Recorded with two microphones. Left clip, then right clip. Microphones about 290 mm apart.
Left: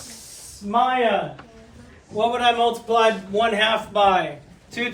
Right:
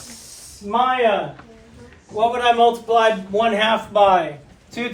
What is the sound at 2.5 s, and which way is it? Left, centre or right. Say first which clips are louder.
A man's voice: right 4 dB; right.